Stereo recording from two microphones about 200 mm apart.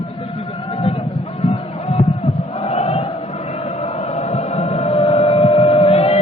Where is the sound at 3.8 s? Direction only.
30° left (ahead or behind).